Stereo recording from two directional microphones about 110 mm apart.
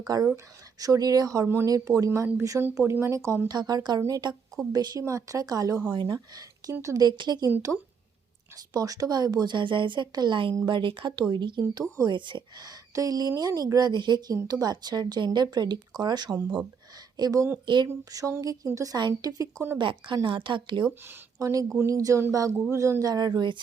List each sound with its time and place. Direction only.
0.1 s a woman's voice: 35° right (ahead or behind)
3.5 s a woman's voice: 35° right (ahead or behind)
5.9 s speech: 45° right (ahead or behind)
6.1 s a woman's voice: 35° right (ahead or behind)
8.7 s a woman's voice: 35° right (ahead or behind)
11.6 s a woman's voice: 35° right (ahead or behind)
12.1 s a woman's voice: 45° right (ahead or behind)
19.8 s speech: 45° right (ahead or behind)
21.3 s a woman's voice: 30° right (ahead or behind)